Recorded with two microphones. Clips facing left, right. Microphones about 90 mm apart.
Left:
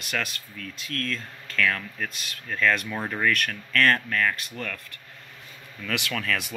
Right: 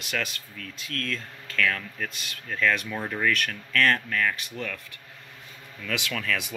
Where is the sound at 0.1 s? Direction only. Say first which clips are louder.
Left 1 dB; centre (ahead or behind).